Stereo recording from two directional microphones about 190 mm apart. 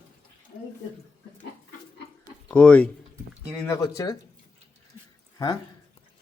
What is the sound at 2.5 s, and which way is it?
Speech, 5° left (ahead or behind).